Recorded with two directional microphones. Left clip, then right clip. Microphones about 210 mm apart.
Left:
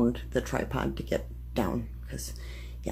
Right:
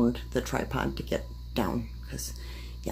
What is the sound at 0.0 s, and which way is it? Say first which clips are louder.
Speech: even; 5° left (ahead or behind).